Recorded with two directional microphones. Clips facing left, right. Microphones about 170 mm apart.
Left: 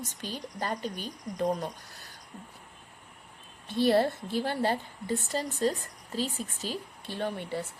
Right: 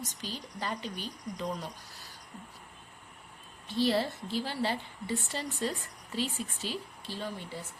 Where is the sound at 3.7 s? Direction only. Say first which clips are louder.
Left 4 dB; 55° left (ahead or behind).